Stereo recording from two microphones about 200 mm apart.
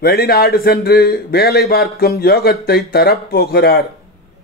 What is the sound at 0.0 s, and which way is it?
A man's voice, 50° left (ahead or behind).